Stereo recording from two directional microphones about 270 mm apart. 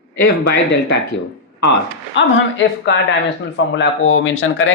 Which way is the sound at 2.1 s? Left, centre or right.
Left.